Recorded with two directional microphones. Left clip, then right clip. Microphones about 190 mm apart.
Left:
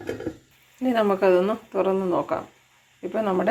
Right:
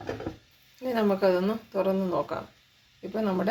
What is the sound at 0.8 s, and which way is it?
Speech, 15° left (ahead or behind).